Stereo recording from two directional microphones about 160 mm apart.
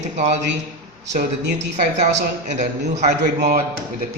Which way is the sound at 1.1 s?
50° right (ahead or behind).